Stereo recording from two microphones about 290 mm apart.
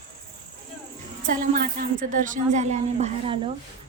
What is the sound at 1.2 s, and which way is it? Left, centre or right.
A woman's voice, right.